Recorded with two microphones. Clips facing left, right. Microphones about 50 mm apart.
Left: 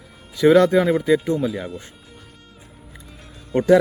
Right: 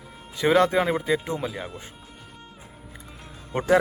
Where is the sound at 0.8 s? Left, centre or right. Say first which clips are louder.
Left 6 dB; centre.